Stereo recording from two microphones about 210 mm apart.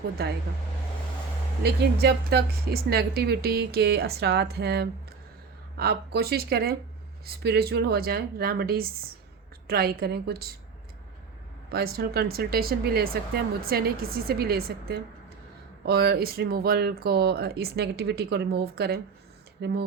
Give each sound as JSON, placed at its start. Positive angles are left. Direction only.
{"t": 0.2, "sound": "speech", "side_deg": -50}
{"t": 1.6, "sound": "speech", "side_deg": -50}
{"t": 11.7, "sound": "speech", "side_deg": -45}